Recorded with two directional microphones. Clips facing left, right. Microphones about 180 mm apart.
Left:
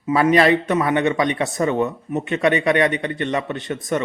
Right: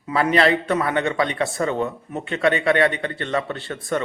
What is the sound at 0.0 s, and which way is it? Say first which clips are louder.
A man's voice: left 3 dB; 20° left (ahead or behind).